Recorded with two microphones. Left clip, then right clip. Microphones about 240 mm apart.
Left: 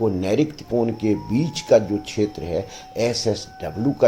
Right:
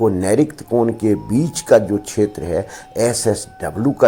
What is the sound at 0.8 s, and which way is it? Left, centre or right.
Speech, centre.